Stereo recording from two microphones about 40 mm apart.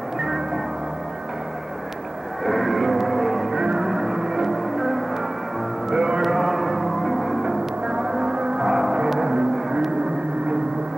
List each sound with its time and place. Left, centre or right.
2.4 s a sound: centre
3.7 s music: centre
5.9 s music: right
6.2 s music: centre
7.4 s music: centre
8.5 s music: centre
9.2 s vehicle: centre